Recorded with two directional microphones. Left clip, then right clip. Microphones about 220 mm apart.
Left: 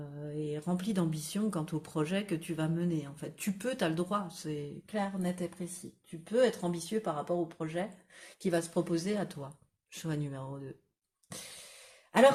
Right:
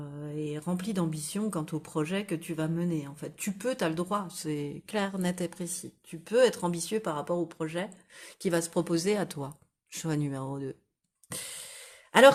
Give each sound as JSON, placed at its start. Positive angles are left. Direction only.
{"t": 0.2, "sound": "speech", "side_deg": -25}